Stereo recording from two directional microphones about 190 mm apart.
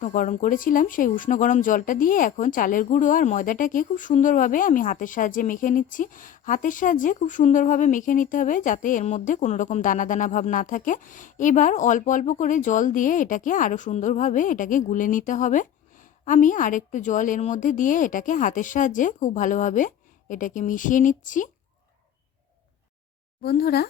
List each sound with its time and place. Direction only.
0.0 s speech: 40° left (ahead or behind)
23.4 s speech: 55° left (ahead or behind)